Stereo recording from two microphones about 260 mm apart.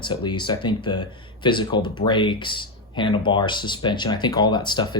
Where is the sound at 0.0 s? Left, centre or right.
Centre.